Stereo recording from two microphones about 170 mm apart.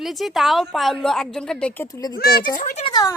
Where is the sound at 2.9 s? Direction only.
25° left (ahead or behind).